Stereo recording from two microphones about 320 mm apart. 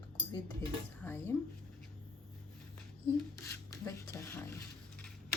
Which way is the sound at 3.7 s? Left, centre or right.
Centre.